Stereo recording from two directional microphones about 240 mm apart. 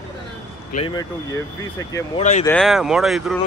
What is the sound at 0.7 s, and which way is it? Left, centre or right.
Speech, centre.